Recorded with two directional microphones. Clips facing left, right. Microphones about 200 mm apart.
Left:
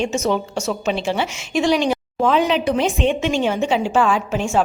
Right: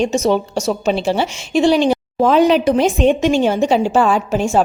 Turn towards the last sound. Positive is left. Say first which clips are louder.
# right 3 dB
turn(degrees=-40)  # may be behind; listen again after turning